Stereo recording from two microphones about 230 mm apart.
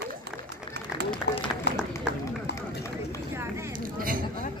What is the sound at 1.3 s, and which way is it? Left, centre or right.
Clapping, left.